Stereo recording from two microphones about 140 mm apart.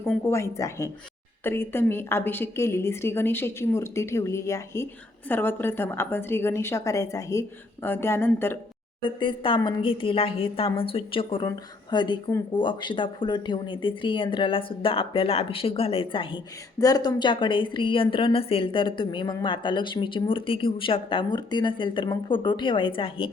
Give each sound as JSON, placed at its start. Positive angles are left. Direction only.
{"t": 0.3, "sound": "a woman's voice", "side_deg": 20}
{"t": 9.0, "sound": "speech", "side_deg": 35}
{"t": 11.4, "sound": "speech", "side_deg": 30}